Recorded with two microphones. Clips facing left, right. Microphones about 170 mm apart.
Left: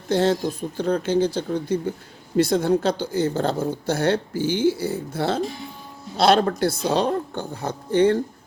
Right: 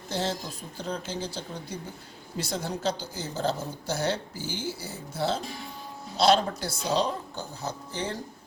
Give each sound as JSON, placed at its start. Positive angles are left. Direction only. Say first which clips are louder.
{"t": 0.1, "sound": "speech", "louder": "left 11 dB", "side_deg": 60}